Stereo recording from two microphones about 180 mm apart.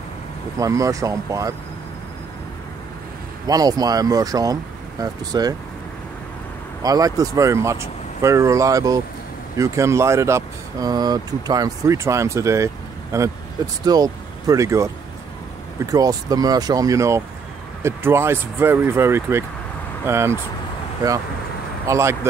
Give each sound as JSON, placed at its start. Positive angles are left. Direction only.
{"t": 0.6, "sound": "speech", "side_deg": -20}
{"t": 3.4, "sound": "speech", "side_deg": -20}
{"t": 6.8, "sound": "speech", "side_deg": -20}
{"t": 21.8, "sound": "speech", "side_deg": -15}